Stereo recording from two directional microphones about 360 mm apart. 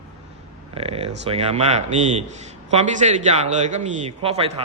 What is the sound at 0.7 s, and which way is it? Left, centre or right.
A man's voice, centre.